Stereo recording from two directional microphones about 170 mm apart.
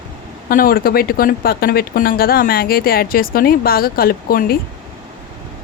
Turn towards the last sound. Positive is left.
turn(degrees=60)  # may be behind; listen again after turning